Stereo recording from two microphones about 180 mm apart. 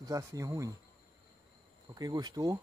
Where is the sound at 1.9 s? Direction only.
20° right (ahead or behind).